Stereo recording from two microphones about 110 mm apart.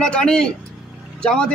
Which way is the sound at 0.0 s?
5° left (ahead or behind).